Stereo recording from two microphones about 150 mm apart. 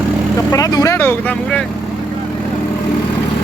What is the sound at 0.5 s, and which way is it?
Speech, 25° left (ahead or behind).